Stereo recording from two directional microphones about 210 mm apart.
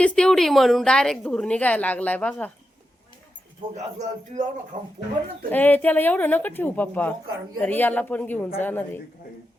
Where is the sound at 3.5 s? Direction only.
35° right (ahead or behind).